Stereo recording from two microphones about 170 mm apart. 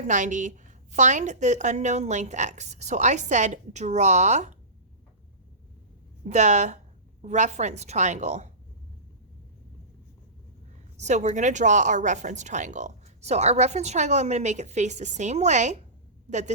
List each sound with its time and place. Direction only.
0.0 s speech: 45° right (ahead or behind)
6.2 s speech: 45° right (ahead or behind)
11.0 s speech: 45° right (ahead or behind)